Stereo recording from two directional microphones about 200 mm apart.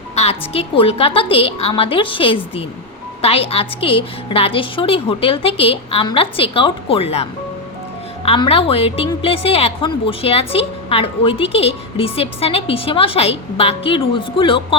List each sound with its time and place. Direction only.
0.2 s a woman's voice: 30° left (ahead or behind)